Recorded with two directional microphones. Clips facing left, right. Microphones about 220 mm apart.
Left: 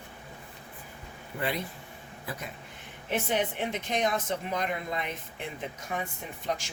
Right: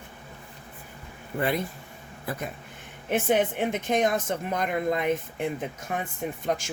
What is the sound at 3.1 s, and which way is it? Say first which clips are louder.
Speech: right 6 dB; 50° right (ahead or behind).